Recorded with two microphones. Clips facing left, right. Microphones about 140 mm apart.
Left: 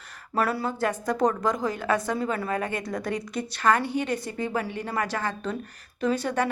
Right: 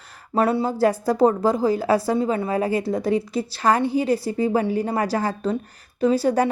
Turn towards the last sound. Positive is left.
turn(degrees=-35)  # may be behind; listen again after turning